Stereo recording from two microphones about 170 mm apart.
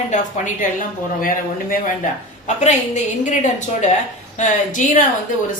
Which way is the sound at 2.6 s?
45° left (ahead or behind).